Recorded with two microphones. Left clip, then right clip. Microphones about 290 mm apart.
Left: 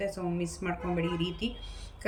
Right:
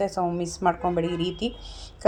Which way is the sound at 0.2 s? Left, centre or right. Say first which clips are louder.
Right 9 dB; right.